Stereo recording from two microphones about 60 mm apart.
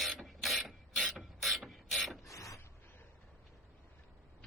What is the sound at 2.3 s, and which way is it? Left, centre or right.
Mechanisms, left.